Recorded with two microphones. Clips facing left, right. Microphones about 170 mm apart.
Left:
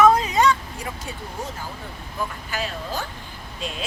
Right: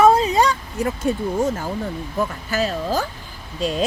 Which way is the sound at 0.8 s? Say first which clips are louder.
Right 12 dB; 50° right (ahead or behind).